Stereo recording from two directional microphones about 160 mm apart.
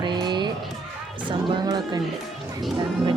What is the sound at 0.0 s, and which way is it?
Music, 25° right (ahead or behind).